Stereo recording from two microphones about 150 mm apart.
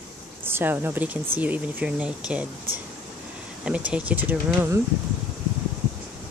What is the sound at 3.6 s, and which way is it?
Speech, 5° right (ahead or behind).